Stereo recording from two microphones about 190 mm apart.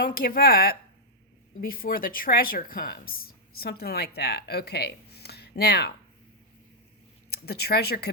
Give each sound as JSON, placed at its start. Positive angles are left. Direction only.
{"t": 0.0, "sound": "speech", "side_deg": 50}
{"t": 7.3, "sound": "speech", "side_deg": 55}